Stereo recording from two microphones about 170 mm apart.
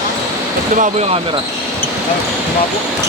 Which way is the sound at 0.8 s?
40° right (ahead or behind).